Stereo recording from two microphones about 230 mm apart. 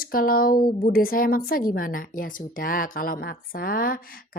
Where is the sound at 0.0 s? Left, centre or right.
Left.